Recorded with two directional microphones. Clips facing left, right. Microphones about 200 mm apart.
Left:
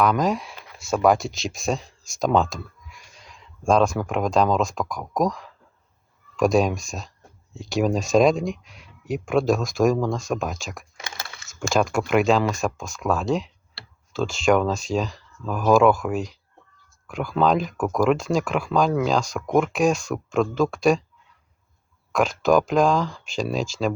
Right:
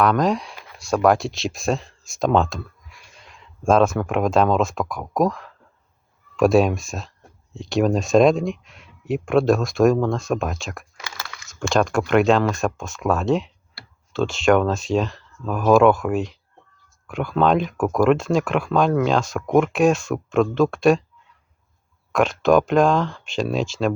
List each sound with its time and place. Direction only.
0.0 s speech: centre (ahead or behind)
10.9 s a sound: 25° left (ahead or behind)
11.7 s speech: centre (ahead or behind)
22.1 s speech: centre (ahead or behind)